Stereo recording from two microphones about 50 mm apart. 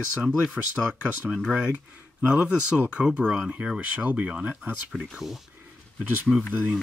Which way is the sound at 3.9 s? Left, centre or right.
Right.